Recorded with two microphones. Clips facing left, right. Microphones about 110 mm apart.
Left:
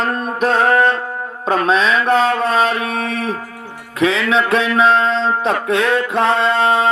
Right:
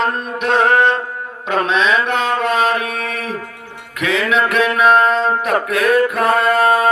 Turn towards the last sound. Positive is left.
turn(degrees=25)  # may be behind; listen again after turning